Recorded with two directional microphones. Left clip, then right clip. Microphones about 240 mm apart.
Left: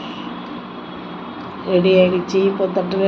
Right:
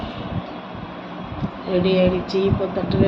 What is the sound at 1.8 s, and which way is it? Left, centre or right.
Speech, centre.